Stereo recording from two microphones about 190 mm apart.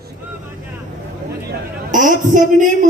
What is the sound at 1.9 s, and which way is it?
A man's voice, 45° right (ahead or behind).